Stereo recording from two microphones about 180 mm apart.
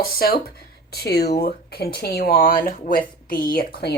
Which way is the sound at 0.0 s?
55° left (ahead or behind).